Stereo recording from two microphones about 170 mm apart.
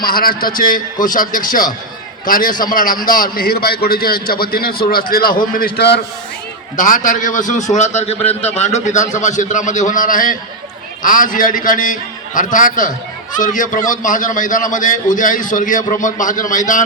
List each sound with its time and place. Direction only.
0.0 s a man's voice: 60° left (ahead or behind)
6.7 s a man's voice: 50° left (ahead or behind)